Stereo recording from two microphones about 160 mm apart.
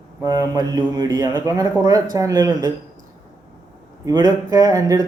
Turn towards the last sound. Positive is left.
turn(degrees=-20)  # may be behind; listen again after turning